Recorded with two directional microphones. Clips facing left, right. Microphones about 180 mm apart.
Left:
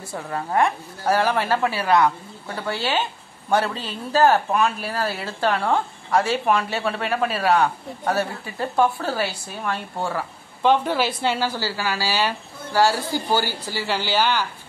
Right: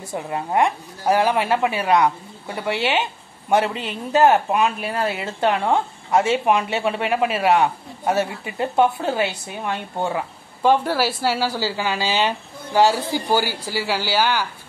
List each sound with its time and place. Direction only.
0.1 s a woman's voice: 15° right (ahead or behind)
10.6 s a woman's voice: 10° right (ahead or behind)